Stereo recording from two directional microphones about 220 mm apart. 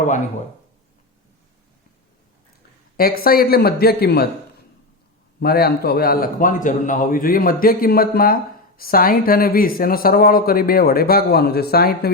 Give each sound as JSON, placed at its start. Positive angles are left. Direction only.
{"t": 3.0, "sound": "speech", "side_deg": 40}
{"t": 5.4, "sound": "a man's voice", "side_deg": 45}